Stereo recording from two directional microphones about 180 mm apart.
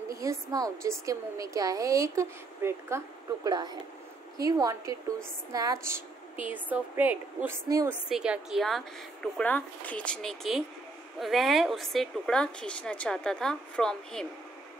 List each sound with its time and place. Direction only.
0.1 s a woman's voice: 20° right (ahead or behind)
6.5 s a woman's voice: 10° right (ahead or behind)
8.1 s speech: 5° right (ahead or behind)